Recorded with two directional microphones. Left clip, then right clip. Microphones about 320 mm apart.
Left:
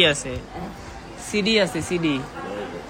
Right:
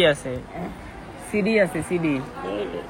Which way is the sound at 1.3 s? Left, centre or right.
Centre.